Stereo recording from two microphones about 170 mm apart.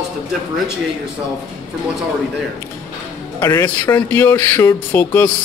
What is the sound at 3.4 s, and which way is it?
Speech, 20° left (ahead or behind).